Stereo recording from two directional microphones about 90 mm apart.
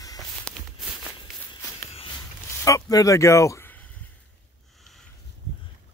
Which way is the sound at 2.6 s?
35° left (ahead or behind).